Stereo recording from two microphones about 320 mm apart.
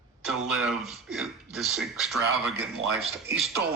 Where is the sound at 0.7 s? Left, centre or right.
Centre.